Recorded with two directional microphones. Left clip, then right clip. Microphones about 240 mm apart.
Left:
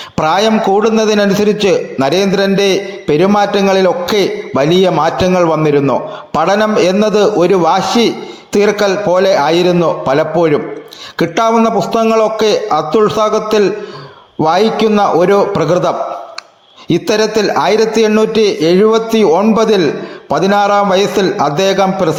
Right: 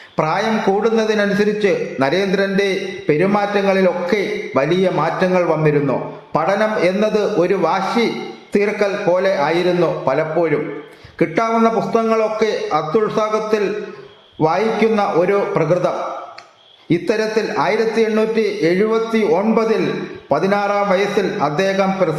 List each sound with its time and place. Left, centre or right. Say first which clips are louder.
0.2 s a man's voice: left 7 dB; left
16.9 s a man's voice: left 5 dB; left